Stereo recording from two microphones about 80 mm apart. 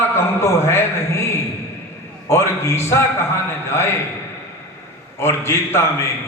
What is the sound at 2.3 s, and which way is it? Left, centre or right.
A man's voice, left.